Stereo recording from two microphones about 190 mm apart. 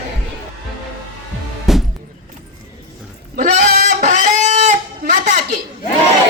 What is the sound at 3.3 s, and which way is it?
Goat, 50° right (ahead or behind).